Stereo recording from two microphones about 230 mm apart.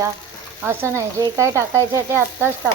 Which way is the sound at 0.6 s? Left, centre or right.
Centre.